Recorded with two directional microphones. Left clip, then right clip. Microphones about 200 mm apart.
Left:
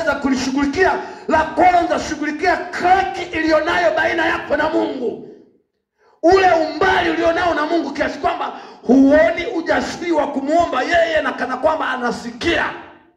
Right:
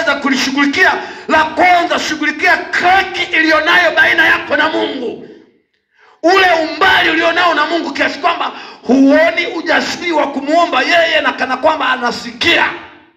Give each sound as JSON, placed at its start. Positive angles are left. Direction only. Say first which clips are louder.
{"t": 0.0, "sound": "speech", "louder": "right 5 dB", "side_deg": 45}
{"t": 6.2, "sound": "speech", "louder": "right 3 dB", "side_deg": 45}